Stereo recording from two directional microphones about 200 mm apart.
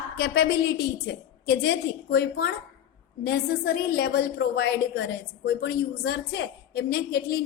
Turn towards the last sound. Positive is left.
turn(degrees=55)  # may be behind; listen again after turning